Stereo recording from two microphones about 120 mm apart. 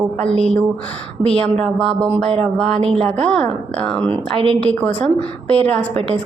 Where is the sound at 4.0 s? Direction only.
50° right (ahead or behind).